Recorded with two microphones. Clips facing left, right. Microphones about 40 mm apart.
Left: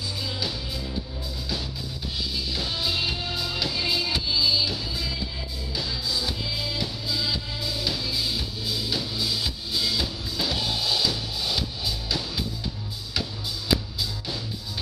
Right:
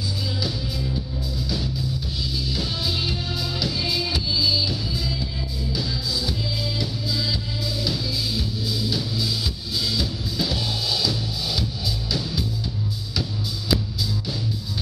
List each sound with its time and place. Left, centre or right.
2.5 s music: centre